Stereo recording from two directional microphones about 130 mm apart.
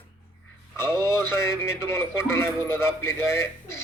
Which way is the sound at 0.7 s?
20° left (ahead or behind).